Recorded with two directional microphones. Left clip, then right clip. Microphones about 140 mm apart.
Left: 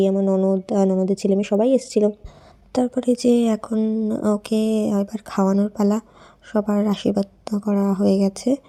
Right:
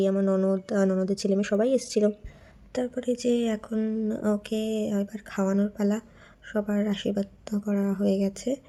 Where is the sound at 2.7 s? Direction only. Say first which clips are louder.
Left 8 dB; 40° left (ahead or behind).